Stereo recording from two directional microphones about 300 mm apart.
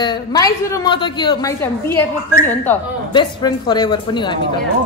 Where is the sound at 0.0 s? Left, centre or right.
Centre.